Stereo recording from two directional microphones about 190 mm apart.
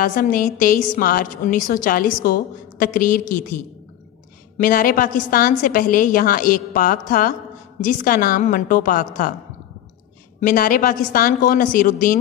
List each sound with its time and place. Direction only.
0.0 s a woman's voice: 45° left (ahead or behind)
10.4 s a woman's voice: 45° left (ahead or behind)